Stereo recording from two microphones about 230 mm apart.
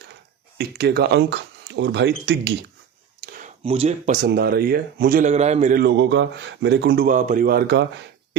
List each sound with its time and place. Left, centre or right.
0.6 s speech: right
3.2 s a sound: right
3.6 s speech: right